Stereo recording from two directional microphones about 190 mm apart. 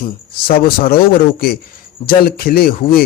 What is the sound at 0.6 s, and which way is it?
Speech, 50° left (ahead or behind).